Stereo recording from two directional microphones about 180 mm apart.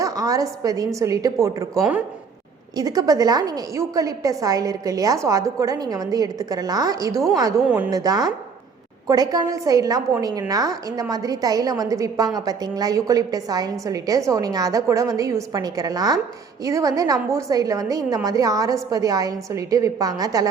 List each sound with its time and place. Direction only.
0.0 s a woman's voice: 20° right (ahead or behind)
2.7 s a woman's voice: 20° right (ahead or behind)